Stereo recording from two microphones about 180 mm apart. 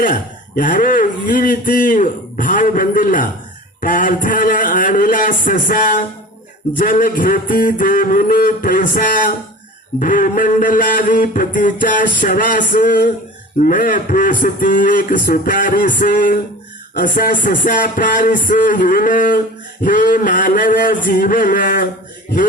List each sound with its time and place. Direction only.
0.0 s speech: 45° left (ahead or behind)